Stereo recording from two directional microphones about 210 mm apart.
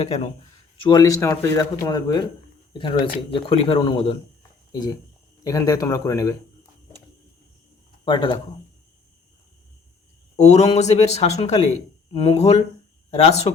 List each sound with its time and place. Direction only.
0.8 s speech: 20° left (ahead or behind)
8.0 s speech: 20° left (ahead or behind)
10.3 s speech: 30° left (ahead or behind)